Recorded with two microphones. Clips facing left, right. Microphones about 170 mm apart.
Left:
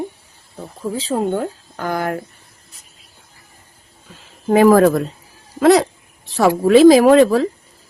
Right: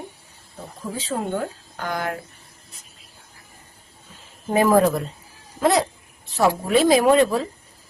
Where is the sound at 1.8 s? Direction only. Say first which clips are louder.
Left 5 dB; 50° left (ahead or behind).